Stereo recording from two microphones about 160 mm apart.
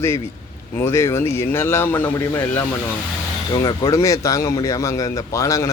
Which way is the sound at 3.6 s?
20° left (ahead or behind).